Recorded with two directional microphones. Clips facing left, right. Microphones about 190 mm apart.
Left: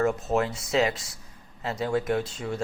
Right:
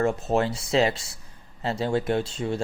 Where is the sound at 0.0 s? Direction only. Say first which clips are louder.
Right 1 dB; 30° right (ahead or behind).